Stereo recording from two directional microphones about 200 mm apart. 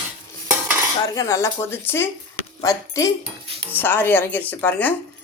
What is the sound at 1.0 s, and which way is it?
Speech, 15° left (ahead or behind).